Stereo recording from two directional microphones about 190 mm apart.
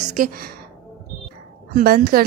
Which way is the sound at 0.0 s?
45° right (ahead or behind).